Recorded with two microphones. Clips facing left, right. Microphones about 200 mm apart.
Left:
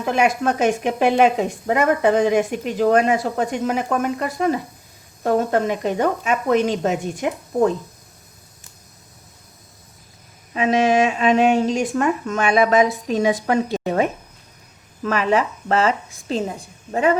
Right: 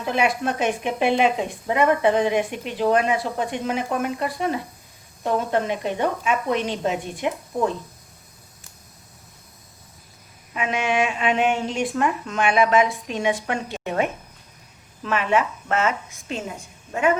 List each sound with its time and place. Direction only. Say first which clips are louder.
0.0 s speech: left 4 dB; 45° left (ahead or behind)
10.5 s speech: left 7 dB; 35° left (ahead or behind)